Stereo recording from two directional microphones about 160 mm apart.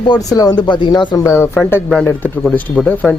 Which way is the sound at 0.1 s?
25° left (ahead or behind).